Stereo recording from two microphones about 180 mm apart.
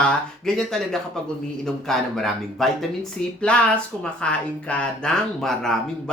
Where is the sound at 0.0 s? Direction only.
5° left (ahead or behind).